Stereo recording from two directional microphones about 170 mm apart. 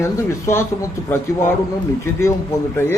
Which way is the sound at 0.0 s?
15° left (ahead or behind).